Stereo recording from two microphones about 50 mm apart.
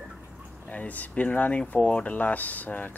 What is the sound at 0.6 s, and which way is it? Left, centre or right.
Speech, left.